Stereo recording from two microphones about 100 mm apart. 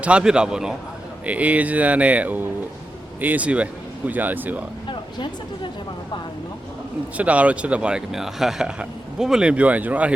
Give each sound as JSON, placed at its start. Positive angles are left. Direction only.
{"t": 0.0, "sound": "speech", "side_deg": -10}
{"t": 4.9, "sound": "speech", "side_deg": 55}
{"t": 7.2, "sound": "speech", "side_deg": -15}